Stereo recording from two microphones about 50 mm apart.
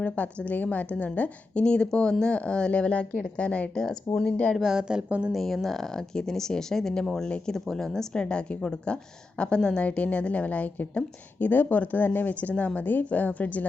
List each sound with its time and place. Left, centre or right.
0.0 s a woman's voice: left
1.6 s speech: centre
3.8 s speech: centre
4.5 s a woman's voice: centre
5.0 s a woman's voice: right
5.3 s a woman's voice: centre; by 12.3 s left
12.3 s a woman's voice: left